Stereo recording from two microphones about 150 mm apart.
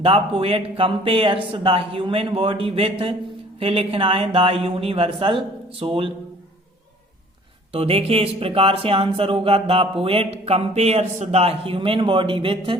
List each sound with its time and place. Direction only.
0.0 s speech: 40° right (ahead or behind)
7.7 s speech: 40° right (ahead or behind)